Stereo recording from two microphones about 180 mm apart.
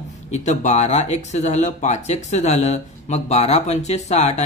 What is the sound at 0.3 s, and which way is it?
Speech, 40° left (ahead or behind).